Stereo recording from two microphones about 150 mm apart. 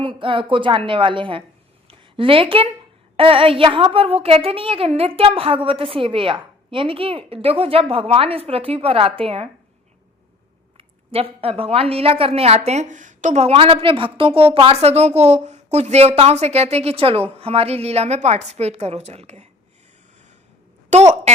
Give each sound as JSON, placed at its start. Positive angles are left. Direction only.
{"t": 0.0, "sound": "a woman's voice", "side_deg": -35}
{"t": 10.8, "sound": "a woman's voice", "side_deg": -40}
{"t": 20.9, "sound": "a woman's voice", "side_deg": -50}